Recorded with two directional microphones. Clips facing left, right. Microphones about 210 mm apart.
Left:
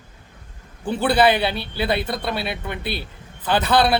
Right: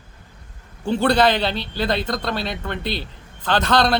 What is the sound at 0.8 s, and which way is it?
Speech, 5° left (ahead or behind).